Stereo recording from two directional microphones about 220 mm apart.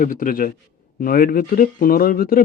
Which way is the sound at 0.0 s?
40° left (ahead or behind).